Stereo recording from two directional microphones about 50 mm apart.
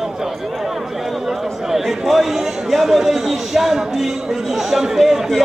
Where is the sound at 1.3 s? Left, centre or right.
Centre.